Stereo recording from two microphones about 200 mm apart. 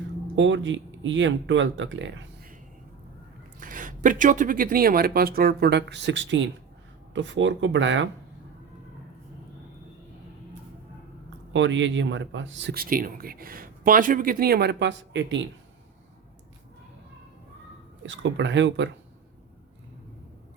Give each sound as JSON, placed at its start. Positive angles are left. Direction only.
{"t": 0.3, "sound": "speech", "side_deg": -70}
{"t": 3.6, "sound": "speech", "side_deg": -40}
{"t": 11.5, "sound": "speech", "side_deg": -65}
{"t": 18.0, "sound": "speech", "side_deg": -65}